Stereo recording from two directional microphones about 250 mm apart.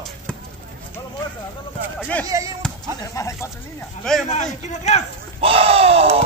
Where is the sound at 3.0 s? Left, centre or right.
Centre.